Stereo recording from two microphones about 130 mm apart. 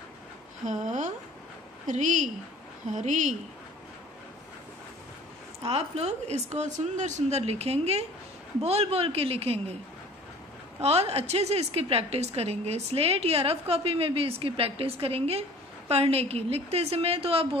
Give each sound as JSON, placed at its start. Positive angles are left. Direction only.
{"t": 0.7, "sound": "speech", "side_deg": -70}
{"t": 5.6, "sound": "a woman's voice", "side_deg": -50}
{"t": 10.8, "sound": "a woman's voice", "side_deg": -55}